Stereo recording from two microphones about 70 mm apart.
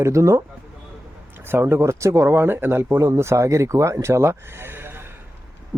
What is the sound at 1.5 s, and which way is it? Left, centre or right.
Speech, right.